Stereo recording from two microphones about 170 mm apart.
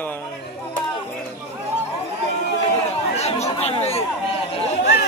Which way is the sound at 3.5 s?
35° left (ahead or behind).